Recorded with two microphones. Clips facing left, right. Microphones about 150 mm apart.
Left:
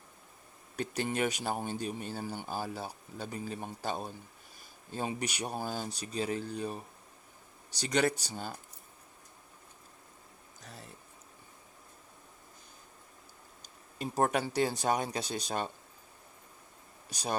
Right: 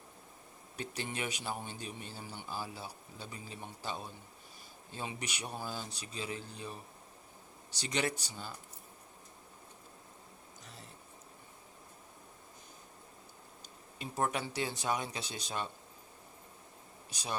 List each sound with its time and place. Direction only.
0.8 s speech: 45° left (ahead or behind)
7.8 s speech: 40° left (ahead or behind)
14.0 s speech: 45° left (ahead or behind)
17.1 s speech: 40° left (ahead or behind)